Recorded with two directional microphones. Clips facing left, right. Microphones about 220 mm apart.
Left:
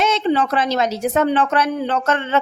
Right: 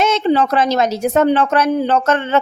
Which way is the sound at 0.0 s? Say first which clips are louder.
Right 3 dB; 45° right (ahead or behind).